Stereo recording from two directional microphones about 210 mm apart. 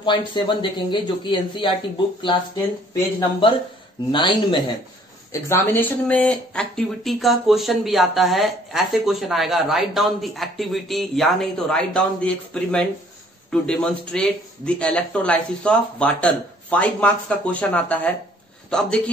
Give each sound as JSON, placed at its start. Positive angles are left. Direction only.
{"t": 0.0, "sound": "speech", "side_deg": 20}
{"t": 2.9, "sound": "speech", "side_deg": 20}
{"t": 5.3, "sound": "a man's voice", "side_deg": 10}